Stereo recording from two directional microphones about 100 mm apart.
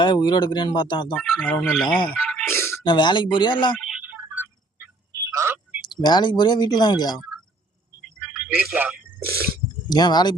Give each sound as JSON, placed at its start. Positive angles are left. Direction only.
{"t": 0.0, "sound": "speech", "side_deg": 50}
{"t": 1.2, "sound": "speech", "side_deg": 5}
{"t": 2.0, "sound": "a sound", "side_deg": 10}
{"t": 2.5, "sound": "a sound", "side_deg": 25}
{"t": 2.8, "sound": "speech", "side_deg": 50}
{"t": 3.8, "sound": "telephone", "side_deg": 0}
{"t": 4.0, "sound": "telephone", "side_deg": -20}
{"t": 5.1, "sound": "telephone", "side_deg": -30}
{"t": 5.8, "sound": "speech", "side_deg": 45}
{"t": 8.3, "sound": "a sound", "side_deg": -15}
{"t": 9.9, "sound": "speech", "side_deg": 45}